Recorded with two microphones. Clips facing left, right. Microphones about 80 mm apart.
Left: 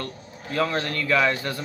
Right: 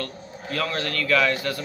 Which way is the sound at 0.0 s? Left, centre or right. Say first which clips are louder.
Right 2 dB; left.